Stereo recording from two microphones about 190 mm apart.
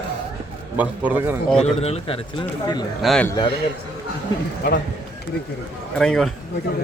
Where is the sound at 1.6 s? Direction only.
35° left (ahead or behind).